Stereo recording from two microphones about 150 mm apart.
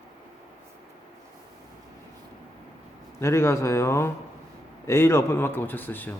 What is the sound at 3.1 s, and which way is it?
A man's voice, 15° left (ahead or behind).